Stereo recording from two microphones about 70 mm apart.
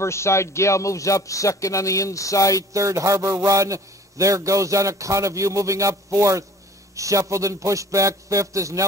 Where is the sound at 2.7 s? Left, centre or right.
Right.